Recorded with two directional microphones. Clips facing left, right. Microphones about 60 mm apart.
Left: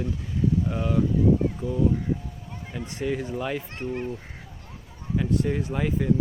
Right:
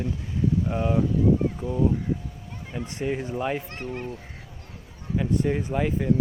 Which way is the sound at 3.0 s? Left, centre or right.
Right.